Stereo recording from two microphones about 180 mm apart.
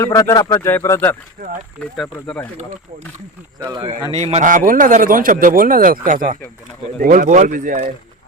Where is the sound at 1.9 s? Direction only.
Centre (ahead or behind).